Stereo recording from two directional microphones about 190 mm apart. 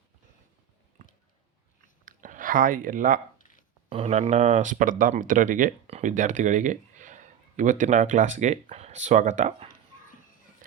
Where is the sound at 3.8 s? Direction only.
30° right (ahead or behind).